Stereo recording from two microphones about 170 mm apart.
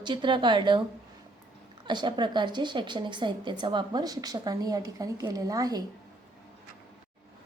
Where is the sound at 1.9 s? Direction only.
25° right (ahead or behind).